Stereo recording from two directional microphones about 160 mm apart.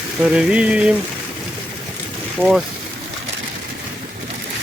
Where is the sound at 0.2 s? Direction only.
5° right (ahead or behind).